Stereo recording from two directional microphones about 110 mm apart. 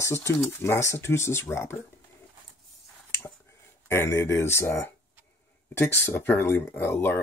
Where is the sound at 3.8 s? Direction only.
20° left (ahead or behind).